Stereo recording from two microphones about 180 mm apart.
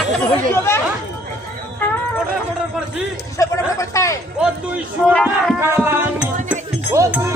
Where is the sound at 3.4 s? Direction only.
15° left (ahead or behind).